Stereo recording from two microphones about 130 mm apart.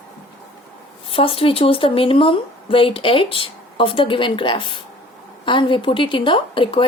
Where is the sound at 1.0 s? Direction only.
45° left (ahead or behind).